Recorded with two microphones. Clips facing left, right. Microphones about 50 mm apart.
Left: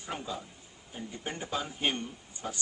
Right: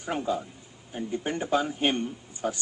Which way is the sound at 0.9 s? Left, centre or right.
Right.